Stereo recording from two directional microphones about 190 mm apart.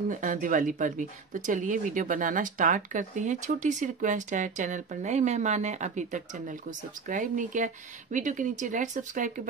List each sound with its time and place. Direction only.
0.1 s speech: 45° right (ahead or behind)